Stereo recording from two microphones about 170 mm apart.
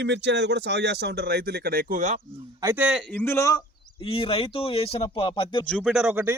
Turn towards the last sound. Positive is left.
turn(degrees=-10)  # may be behind; listen again after turning